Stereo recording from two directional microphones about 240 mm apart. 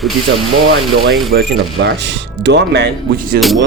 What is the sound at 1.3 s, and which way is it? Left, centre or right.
Speech, right.